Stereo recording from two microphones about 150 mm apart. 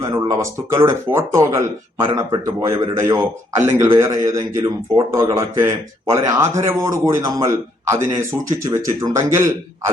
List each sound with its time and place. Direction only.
0.0 s a man's voice: 20° right (ahead or behind)